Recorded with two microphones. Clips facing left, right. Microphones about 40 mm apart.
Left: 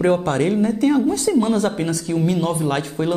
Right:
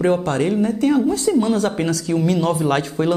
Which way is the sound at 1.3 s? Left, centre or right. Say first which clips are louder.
Even; left.